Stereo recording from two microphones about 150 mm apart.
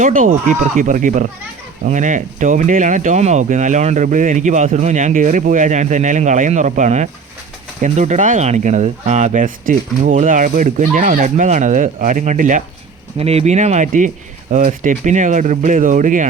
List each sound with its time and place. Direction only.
0.0 s speech: 60° right (ahead or behind)
13.1 s speech: 45° right (ahead or behind); by 16.2 s 60° right (ahead or behind)